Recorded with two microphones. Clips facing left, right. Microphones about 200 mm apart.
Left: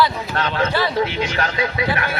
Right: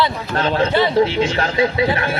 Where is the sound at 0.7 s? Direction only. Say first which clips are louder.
Right 5 dB; 25° right (ahead or behind).